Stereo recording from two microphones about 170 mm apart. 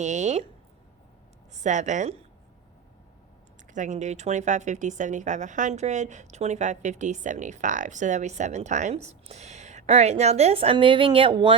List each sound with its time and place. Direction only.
0.0 s a woman's voice: 45° right (ahead or behind)
1.5 s a woman's voice: 45° right (ahead or behind)
3.7 s a woman's voice: 45° right (ahead or behind); by 11.5 s 30° right (ahead or behind)